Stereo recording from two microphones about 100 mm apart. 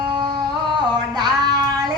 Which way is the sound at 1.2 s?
45° right (ahead or behind).